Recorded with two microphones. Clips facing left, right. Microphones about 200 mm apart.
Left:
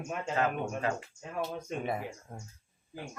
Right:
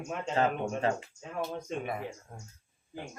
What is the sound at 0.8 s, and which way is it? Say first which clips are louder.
Speech: right 4 dB; 30° right (ahead or behind).